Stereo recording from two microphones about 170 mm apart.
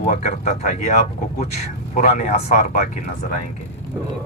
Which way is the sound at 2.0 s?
45° left (ahead or behind).